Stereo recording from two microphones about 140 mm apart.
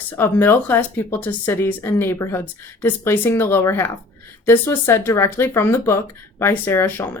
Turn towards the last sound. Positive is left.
turn(degrees=15)  # may be behind; listen again after turning